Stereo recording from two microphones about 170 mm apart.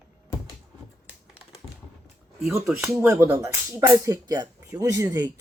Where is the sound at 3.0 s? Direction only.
15° right (ahead or behind).